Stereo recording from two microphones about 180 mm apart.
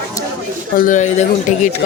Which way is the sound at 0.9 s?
40° left (ahead or behind).